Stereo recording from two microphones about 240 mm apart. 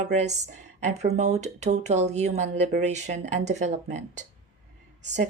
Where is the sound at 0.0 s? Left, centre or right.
Right.